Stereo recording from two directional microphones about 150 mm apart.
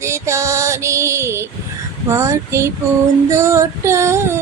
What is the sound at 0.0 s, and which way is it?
Female singing, 20° right (ahead or behind).